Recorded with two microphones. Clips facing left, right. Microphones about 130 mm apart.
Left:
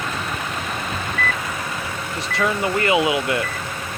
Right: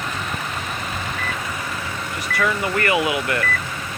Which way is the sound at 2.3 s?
20° left (ahead or behind).